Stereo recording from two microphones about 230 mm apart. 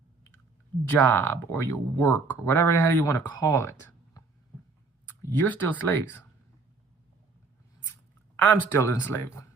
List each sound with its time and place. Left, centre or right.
0.9 s speech: centre
5.2 s speech: centre
8.4 s speech: centre